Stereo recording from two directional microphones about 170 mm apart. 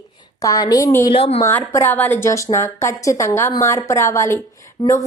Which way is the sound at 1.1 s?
35° left (ahead or behind).